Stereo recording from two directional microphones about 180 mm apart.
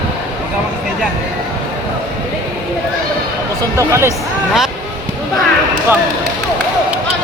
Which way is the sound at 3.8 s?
15° right (ahead or behind).